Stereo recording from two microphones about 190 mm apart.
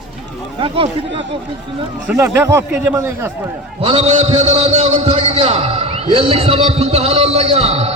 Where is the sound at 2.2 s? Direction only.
15° right (ahead or behind).